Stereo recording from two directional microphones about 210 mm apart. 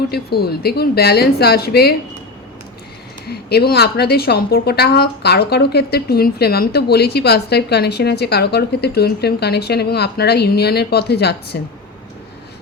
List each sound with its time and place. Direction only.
0.1 s a woman's voice: 50° left (ahead or behind)
3.2 s a woman's voice: 50° left (ahead or behind)